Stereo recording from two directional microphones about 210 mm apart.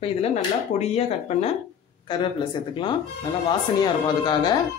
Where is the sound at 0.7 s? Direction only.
30° left (ahead or behind).